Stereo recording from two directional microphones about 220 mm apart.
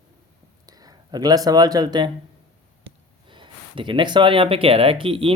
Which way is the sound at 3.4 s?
25° right (ahead or behind).